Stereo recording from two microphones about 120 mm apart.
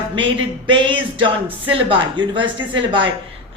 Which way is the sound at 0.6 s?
45° right (ahead or behind).